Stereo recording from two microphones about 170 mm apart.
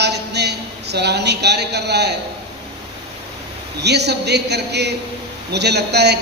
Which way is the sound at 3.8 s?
80° right.